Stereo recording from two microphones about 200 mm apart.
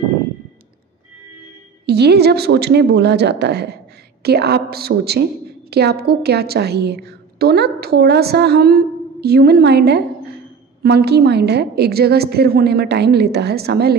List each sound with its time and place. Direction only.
1.9 s a woman's voice: 55° right (ahead or behind)